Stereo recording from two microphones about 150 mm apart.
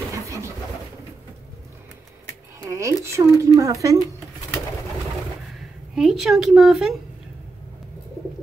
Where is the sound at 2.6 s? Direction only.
20° right (ahead or behind).